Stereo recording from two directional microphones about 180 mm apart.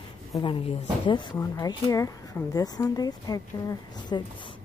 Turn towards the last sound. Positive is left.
turn(degrees=20)  # may be behind; listen again after turning